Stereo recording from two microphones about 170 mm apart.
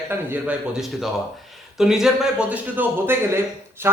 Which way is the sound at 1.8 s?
Centre (ahead or behind).